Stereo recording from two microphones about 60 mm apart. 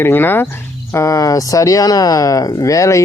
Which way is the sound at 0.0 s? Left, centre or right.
Left.